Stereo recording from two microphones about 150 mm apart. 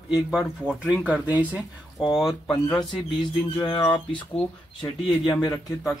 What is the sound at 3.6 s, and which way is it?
Speech, 30° left (ahead or behind).